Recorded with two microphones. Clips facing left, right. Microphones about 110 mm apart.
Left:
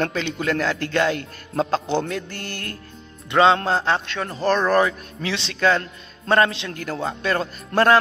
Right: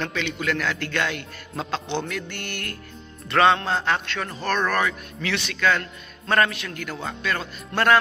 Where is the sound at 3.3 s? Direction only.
25° left (ahead or behind).